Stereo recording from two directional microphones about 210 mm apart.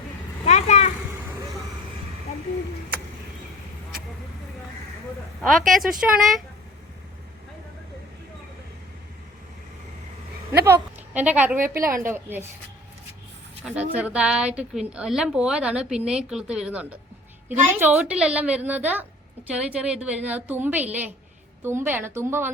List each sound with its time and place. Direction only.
0.4 s vehicle: 35° left (ahead or behind)
5.4 s a woman's voice: centre (ahead or behind)
10.7 s a woman's voice: 5° right (ahead or behind)
13.7 s a woman's voice: 5° right (ahead or behind)